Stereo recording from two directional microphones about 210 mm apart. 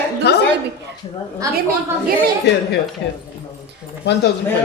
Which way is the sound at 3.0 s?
55° left (ahead or behind).